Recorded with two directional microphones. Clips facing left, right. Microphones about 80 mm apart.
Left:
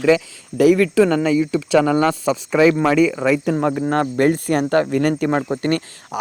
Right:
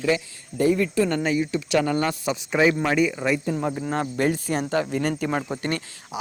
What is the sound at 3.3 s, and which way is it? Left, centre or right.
Speech, left.